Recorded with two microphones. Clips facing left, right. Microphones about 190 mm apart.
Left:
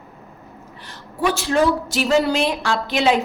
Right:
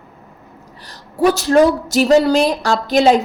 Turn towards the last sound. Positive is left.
turn(degrees=-40)  # may be behind; listen again after turning